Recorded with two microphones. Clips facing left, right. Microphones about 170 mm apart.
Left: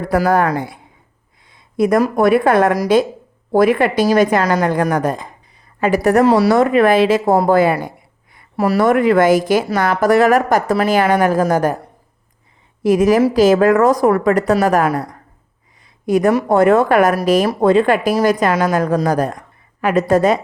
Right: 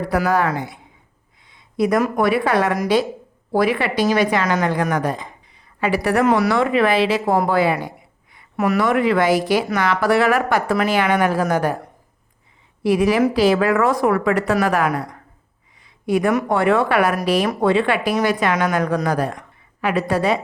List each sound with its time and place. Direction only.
0.0 s speech: 50° left (ahead or behind)
8.5 s speech: 35° left (ahead or behind)
12.8 s a woman's voice: 45° left (ahead or behind)
16.0 s speech: 45° left (ahead or behind)